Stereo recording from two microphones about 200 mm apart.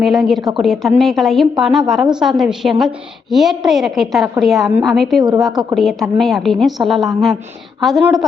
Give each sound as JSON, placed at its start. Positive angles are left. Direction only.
{"t": 0.0, "sound": "a woman's voice", "side_deg": 0}